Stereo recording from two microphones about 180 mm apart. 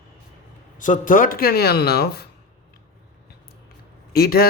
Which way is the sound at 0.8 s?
45° left (ahead or behind).